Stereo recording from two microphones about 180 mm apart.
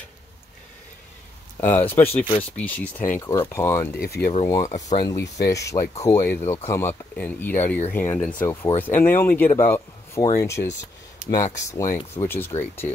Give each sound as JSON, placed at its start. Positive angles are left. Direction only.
{"t": 1.6, "sound": "speech", "side_deg": 10}
{"t": 3.9, "sound": "speech", "side_deg": 60}
{"t": 4.6, "sound": "speech", "side_deg": 40}
{"t": 4.9, "sound": "speech", "side_deg": 20}